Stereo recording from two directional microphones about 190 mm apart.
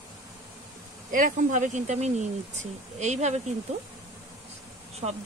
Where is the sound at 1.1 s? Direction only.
45° right (ahead or behind).